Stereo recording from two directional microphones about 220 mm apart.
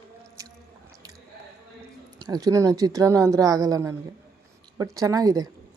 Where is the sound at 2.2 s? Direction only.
20° right (ahead or behind).